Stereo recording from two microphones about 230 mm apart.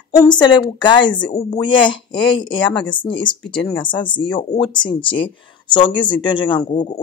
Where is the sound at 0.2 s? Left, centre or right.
Centre.